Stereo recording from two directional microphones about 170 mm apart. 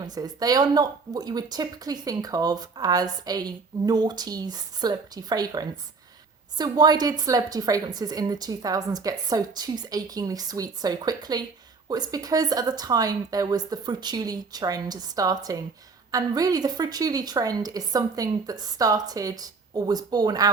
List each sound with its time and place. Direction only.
0.0 s speech: 25° right (ahead or behind)